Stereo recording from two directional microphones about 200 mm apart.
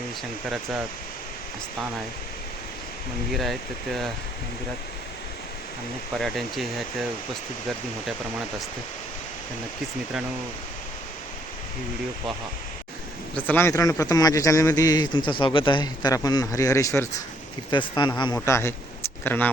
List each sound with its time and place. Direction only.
3.3 s speech: centre (ahead or behind)
6.1 s speech: centre (ahead or behind)
13.3 s speech: 10° left (ahead or behind)
18.3 s speech: 10° left (ahead or behind)